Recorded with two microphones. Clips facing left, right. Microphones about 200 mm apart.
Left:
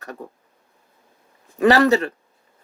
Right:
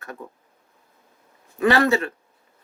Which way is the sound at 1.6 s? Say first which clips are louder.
Left 4 dB; 40° left (ahead or behind).